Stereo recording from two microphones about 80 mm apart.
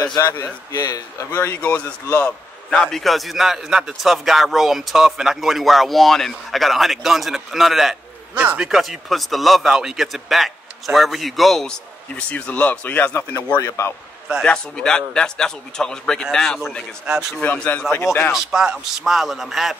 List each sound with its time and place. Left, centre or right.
0.0 s a man's voice: left
1.3 s a man's voice: left
1.6 s a man's voice: centre
8.4 s speech: centre
8.6 s a man's voice: centre; by 13.5 s left
13.6 s a man's voice: left
14.4 s a man's voice: centre
17.0 s speech: centre
17.4 s speech: left
18.3 s a man's voice: centre